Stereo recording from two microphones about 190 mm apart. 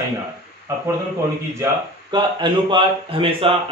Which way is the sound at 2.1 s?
25° right (ahead or behind).